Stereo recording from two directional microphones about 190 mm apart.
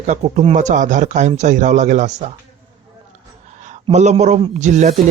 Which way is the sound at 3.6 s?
40° right (ahead or behind).